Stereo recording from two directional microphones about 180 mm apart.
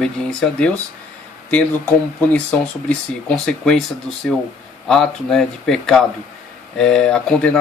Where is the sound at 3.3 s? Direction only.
5° left (ahead or behind).